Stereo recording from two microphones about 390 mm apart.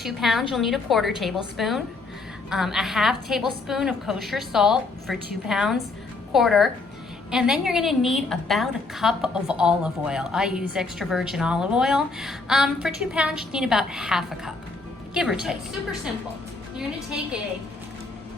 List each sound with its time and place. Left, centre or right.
0.0 s a woman's voice: centre